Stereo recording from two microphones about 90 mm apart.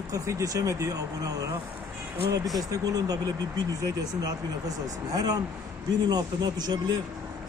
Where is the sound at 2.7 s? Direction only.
45° right (ahead or behind).